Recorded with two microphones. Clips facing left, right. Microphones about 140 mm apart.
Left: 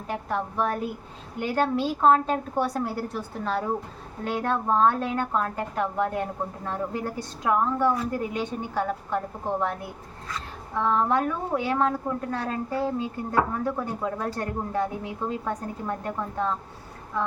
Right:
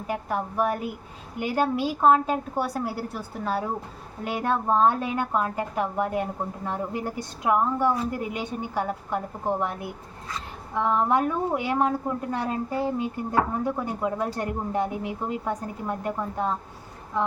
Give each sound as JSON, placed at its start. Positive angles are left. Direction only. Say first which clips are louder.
{"t": 0.1, "sound": "a woman's voice", "louder": "even", "side_deg": -10}
{"t": 10.8, "sound": "a woman's voice", "louder": "right 1 dB", "side_deg": -15}